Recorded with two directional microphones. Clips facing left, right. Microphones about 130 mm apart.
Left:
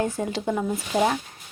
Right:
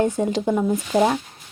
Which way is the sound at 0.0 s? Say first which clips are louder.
Right 5 dB; 25° right (ahead or behind).